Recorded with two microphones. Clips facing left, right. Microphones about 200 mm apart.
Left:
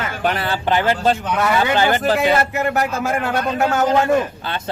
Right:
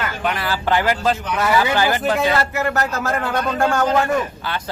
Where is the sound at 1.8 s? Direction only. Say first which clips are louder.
Left 2 dB; 25° left (ahead or behind).